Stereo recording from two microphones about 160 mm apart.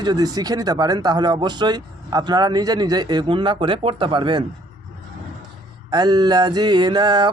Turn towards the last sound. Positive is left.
turn(degrees=-25)  # may be behind; listen again after turning